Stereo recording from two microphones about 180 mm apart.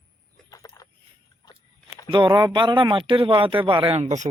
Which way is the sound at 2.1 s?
25° right (ahead or behind).